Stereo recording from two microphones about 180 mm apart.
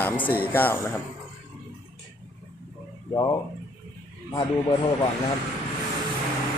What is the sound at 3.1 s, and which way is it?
Speech, 20° left (ahead or behind).